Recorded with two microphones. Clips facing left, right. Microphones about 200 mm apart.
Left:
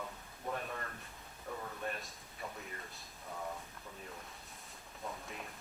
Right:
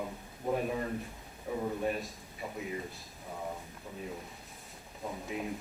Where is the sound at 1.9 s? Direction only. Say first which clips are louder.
Right 9 dB; 5° right (ahead or behind).